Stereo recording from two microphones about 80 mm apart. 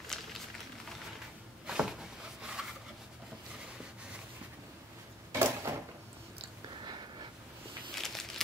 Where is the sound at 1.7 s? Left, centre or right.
Centre.